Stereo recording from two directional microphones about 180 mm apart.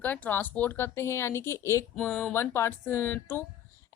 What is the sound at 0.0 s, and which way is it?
A woman's voice, 10° left (ahead or behind).